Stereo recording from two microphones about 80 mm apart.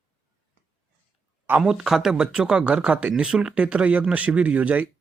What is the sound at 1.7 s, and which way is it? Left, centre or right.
Speech, centre.